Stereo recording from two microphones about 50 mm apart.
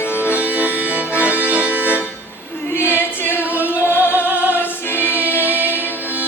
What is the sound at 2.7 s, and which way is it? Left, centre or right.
A capella, left.